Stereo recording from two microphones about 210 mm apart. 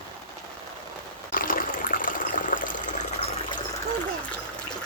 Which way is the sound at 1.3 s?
40° left (ahead or behind).